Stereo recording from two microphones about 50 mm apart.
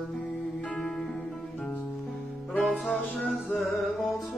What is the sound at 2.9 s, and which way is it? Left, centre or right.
Music, left.